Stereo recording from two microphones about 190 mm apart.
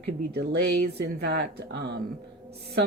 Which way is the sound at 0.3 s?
60° right (ahead or behind).